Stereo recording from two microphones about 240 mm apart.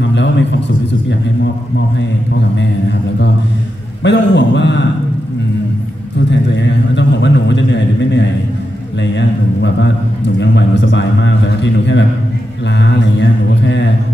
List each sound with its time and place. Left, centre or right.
0.1 s a man's voice: left
4.0 s a man's voice: left
6.5 s a man's voice: left